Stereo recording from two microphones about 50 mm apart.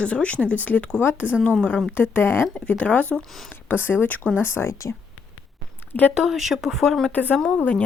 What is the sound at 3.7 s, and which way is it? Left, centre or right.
Speech, left.